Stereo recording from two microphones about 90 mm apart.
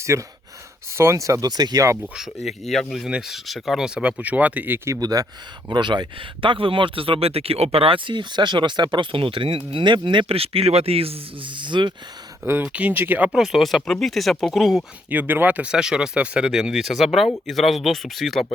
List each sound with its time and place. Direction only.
0.0 s speech: 35° right (ahead or behind)
2.1 s speech: 5° right (ahead or behind); by 4.9 s 20° right (ahead or behind)
4.9 s speech: 45° right (ahead or behind)
5.6 s speech: 55° right (ahead or behind)
12.6 s speech: 15° right (ahead or behind)
13.3 s speech: 5° right (ahead or behind)
15.1 s speech: 20° right (ahead or behind); by 18.4 s centre (ahead or behind)